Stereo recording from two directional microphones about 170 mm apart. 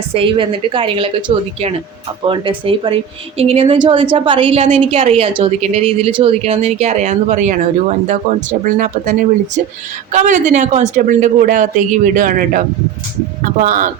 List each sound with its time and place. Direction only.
0.1 s a woman's voice: 30° right (ahead or behind)
2.2 s a woman's voice: 30° right (ahead or behind); by 13.9 s 50° right (ahead or behind)